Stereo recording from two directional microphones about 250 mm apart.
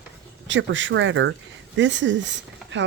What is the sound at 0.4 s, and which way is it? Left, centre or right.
Speech, right.